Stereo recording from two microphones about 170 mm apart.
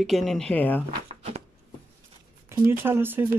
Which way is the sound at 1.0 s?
40° right (ahead or behind).